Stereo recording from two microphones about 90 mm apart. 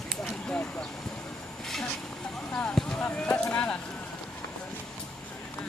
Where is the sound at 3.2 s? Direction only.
15° left (ahead or behind).